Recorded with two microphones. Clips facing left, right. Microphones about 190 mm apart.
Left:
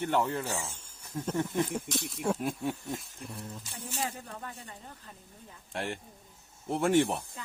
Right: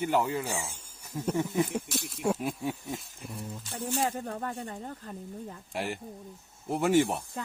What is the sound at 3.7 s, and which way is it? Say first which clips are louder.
Speech: right 8 dB; 45° right (ahead or behind).